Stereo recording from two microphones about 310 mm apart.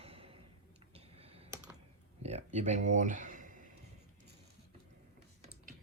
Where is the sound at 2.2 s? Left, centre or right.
Right.